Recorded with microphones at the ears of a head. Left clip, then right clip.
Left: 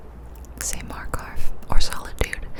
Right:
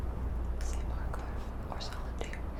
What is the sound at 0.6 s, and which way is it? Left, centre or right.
Whispering, left.